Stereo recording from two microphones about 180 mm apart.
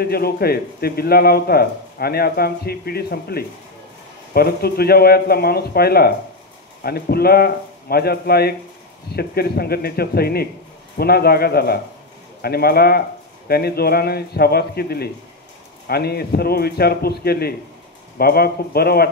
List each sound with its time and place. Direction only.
0.0 s speech: 60° left (ahead or behind)